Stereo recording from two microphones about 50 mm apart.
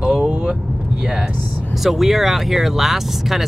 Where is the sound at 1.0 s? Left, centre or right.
Right.